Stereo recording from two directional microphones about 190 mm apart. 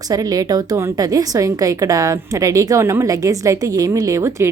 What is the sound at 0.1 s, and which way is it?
A woman's voice, 20° right (ahead or behind).